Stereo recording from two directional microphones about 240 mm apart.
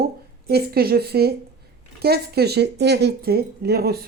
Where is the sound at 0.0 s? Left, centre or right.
Right.